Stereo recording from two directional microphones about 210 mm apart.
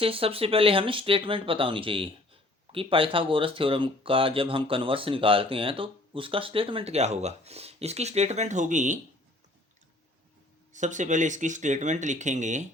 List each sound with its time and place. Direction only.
0.0 s speech: 25° right (ahead or behind)
10.7 s speech: 35° right (ahead or behind)